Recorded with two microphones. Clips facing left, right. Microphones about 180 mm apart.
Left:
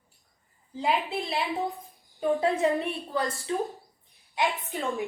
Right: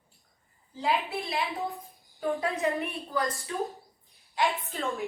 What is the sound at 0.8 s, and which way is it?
A woman's voice, 20° left (ahead or behind).